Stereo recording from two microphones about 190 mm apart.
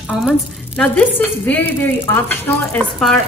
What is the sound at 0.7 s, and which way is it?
Speech, 10° left (ahead or behind).